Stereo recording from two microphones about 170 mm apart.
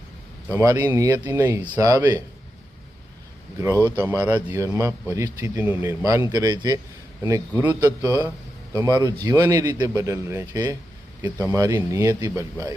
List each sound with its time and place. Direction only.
0.4 s speech: 15° right (ahead or behind)
3.8 s speech: 15° left (ahead or behind)
4.0 s speech: 15° right (ahead or behind)
8.7 s speech: 20° right (ahead or behind)